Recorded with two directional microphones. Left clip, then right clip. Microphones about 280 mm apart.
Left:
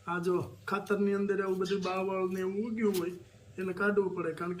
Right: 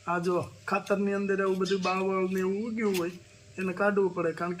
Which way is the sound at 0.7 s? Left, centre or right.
Centre.